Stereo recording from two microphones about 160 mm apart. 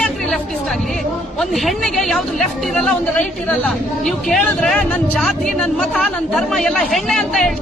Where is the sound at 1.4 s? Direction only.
Centre (ahead or behind).